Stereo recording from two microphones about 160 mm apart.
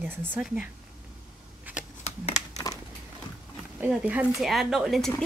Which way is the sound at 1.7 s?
10° right (ahead or behind).